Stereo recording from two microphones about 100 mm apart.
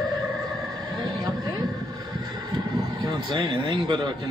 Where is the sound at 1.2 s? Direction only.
45° right (ahead or behind).